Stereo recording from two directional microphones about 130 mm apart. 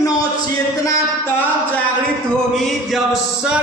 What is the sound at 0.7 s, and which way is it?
A woman's voice, 25° left (ahead or behind).